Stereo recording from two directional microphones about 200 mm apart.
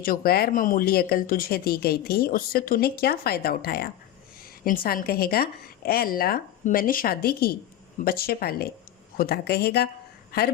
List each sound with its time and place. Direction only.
0.0 s speech: 45° left (ahead or behind)